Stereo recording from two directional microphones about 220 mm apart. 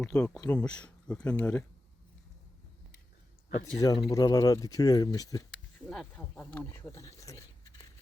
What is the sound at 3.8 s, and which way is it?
Speech, 20° left (ahead or behind).